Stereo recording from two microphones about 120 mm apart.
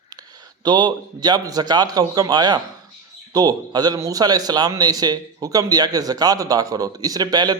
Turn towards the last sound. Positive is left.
turn(degrees=-35)  # may be behind; listen again after turning